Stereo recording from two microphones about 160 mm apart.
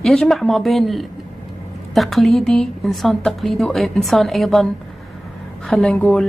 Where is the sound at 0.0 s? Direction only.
Centre (ahead or behind).